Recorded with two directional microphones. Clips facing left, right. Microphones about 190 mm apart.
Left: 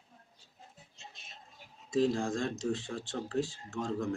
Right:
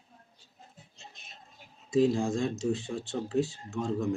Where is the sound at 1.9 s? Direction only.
15° right (ahead or behind).